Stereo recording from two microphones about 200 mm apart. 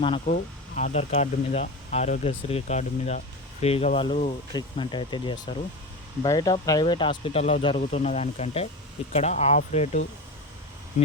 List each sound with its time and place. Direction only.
0.3 s speech: 45° left (ahead or behind)